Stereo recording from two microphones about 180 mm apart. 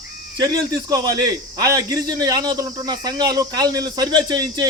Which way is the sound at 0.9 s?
20° right (ahead or behind).